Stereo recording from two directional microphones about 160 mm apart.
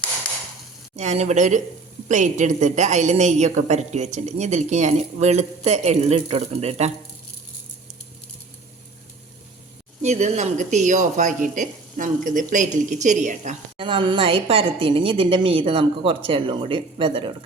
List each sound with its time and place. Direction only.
0.9 s a woman's voice: 45° right (ahead or behind)
10.0 s a woman's voice: 45° right (ahead or behind)
13.7 s a woman's voice: 30° right (ahead or behind)